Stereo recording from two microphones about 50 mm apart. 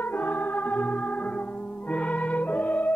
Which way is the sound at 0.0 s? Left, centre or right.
Left.